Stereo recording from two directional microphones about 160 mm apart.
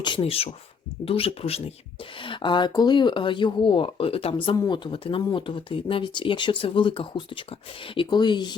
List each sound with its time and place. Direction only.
0.0 s speech: 30° left (ahead or behind)
4.5 s speech: 25° left (ahead or behind)